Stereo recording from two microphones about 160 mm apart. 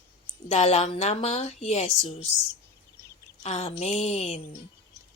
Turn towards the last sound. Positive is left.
turn(degrees=40)  # may be behind; listen again after turning